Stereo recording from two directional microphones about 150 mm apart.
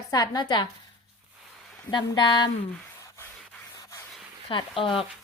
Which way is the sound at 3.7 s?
20° left (ahead or behind).